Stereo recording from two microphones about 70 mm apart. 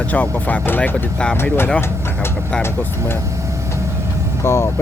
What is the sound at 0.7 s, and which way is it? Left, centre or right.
Speech, left.